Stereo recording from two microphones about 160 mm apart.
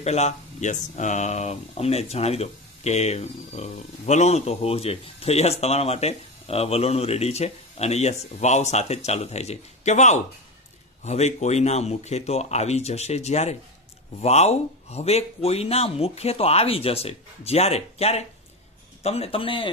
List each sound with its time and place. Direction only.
0.0 s speech: 45° left (ahead or behind)